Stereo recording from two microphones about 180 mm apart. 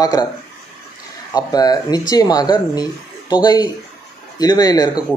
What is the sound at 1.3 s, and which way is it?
Speech, 20° left (ahead or behind).